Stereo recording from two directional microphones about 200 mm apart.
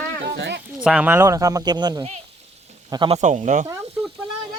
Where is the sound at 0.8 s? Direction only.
5° right (ahead or behind); by 3.2 s 25° right (ahead or behind).